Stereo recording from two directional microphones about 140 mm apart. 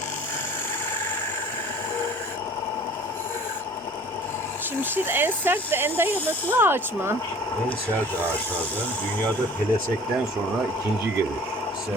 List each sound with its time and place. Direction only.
4.8 s speech: 15° right (ahead or behind)